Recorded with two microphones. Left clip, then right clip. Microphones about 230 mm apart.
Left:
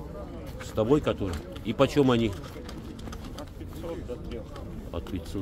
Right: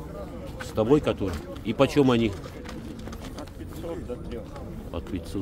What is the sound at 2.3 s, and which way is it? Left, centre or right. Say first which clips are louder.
Pigeon: right 2 dB; left.